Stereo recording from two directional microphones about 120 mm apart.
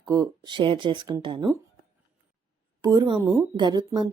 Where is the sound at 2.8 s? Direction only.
35° right (ahead or behind).